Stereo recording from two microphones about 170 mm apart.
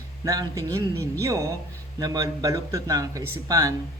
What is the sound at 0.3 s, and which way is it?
A woman's voice, 20° right (ahead or behind).